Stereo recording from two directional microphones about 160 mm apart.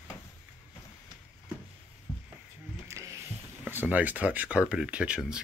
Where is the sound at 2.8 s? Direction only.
15° right (ahead or behind).